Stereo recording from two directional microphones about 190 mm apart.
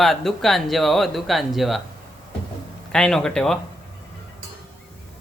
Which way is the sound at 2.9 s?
5° left (ahead or behind).